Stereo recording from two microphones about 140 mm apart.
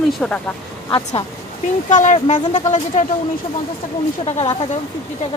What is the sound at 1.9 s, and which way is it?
Speech, 60° left (ahead or behind).